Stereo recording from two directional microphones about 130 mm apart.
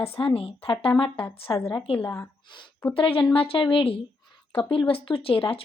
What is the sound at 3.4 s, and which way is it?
Speech, 45° left (ahead or behind).